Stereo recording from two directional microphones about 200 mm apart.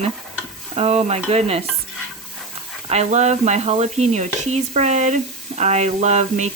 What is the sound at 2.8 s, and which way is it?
Speech, 35° right (ahead or behind).